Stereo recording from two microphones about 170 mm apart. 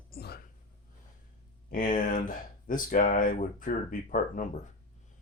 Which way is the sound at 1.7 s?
50° left (ahead or behind).